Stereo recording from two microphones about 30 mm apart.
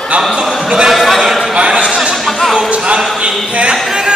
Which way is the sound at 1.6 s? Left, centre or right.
Right.